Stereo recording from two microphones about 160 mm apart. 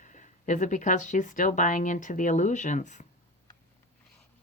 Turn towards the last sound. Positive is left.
turn(degrees=50)  # may be behind; listen again after turning